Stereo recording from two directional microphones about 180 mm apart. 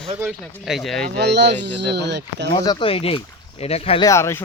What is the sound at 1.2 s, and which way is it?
Speech, 70° right (ahead or behind).